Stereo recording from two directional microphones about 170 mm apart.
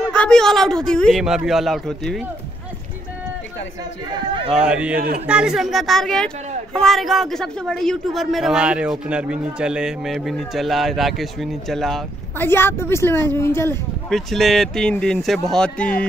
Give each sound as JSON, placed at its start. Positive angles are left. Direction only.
{"t": 0.1, "sound": "speech", "side_deg": 5}
{"t": 4.5, "sound": "speech", "side_deg": -5}
{"t": 4.9, "sound": "a man's voice", "side_deg": -60}
{"t": 5.2, "sound": "speech", "side_deg": -5}
{"t": 12.4, "sound": "a woman's voice", "side_deg": 15}
{"t": 14.1, "sound": "a woman's voice", "side_deg": 0}